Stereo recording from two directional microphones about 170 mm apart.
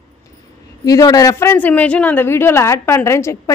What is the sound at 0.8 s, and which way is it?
A woman's voice, 20° left (ahead or behind).